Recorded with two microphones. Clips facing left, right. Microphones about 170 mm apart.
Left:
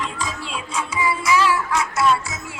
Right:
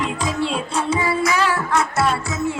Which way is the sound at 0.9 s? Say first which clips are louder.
Right 1 dB; 60° right (ahead or behind).